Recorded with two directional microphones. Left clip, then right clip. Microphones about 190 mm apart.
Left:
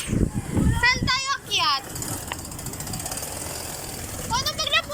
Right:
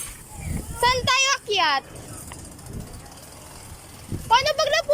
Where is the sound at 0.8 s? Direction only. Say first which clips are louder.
Right 3 dB; 45° right (ahead or behind).